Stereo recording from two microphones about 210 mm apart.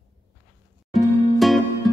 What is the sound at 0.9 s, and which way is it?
Music, centre (ahead or behind).